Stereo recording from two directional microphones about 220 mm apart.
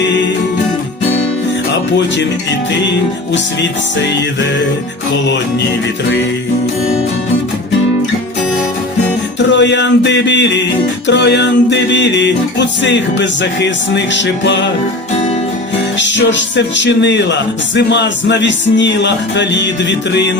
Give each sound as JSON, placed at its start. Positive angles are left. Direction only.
{"t": 3.3, "sound": "music", "side_deg": 55}
{"t": 9.5, "sound": "music", "side_deg": 55}
{"t": 16.0, "sound": "music", "side_deg": 55}